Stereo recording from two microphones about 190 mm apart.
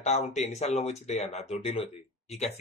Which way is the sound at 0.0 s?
35° left (ahead or behind).